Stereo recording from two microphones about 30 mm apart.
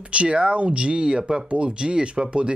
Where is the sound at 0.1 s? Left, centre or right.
Right.